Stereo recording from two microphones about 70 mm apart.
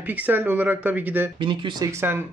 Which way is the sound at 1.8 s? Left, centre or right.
Right.